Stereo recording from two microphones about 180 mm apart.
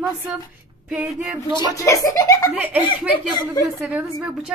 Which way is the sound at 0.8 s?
5° right (ahead or behind).